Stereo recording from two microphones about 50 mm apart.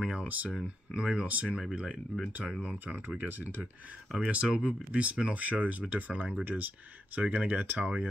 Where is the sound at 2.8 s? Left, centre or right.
Right.